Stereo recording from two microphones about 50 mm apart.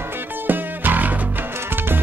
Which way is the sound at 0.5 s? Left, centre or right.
Right.